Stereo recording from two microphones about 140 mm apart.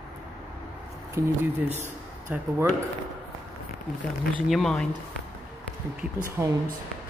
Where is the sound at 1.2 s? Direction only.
20° right (ahead or behind).